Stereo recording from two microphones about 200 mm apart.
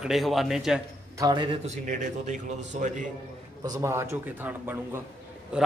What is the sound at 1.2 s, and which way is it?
Speech, 25° right (ahead or behind).